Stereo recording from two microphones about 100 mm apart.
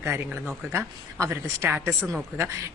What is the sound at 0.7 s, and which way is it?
Speech, 30° right (ahead or behind).